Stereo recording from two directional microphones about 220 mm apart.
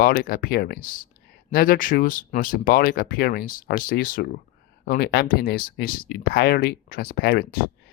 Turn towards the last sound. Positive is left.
turn(degrees=45)  # may be behind; listen again after turning